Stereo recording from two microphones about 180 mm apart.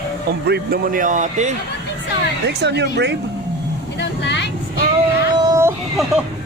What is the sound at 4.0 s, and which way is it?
Vehicle, 70° left (ahead or behind).